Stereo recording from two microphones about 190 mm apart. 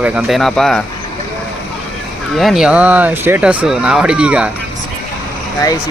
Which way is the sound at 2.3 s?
Centre (ahead or behind).